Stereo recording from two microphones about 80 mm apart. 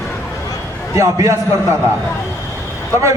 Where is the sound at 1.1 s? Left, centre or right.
Right.